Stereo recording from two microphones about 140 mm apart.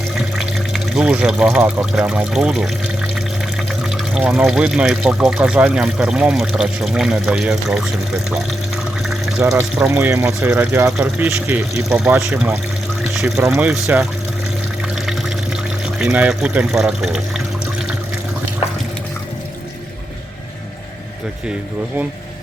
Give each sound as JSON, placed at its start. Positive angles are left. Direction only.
{"t": 0.3, "sound": "speech", "side_deg": -5}
{"t": 4.1, "sound": "speech", "side_deg": -5}
{"t": 9.6, "sound": "speech", "side_deg": -15}
{"t": 11.0, "sound": "speech", "side_deg": -10}
{"t": 13.4, "sound": "speech", "side_deg": -20}
{"t": 13.7, "sound": "speech", "side_deg": -5}
{"t": 16.0, "sound": "speech", "side_deg": -10}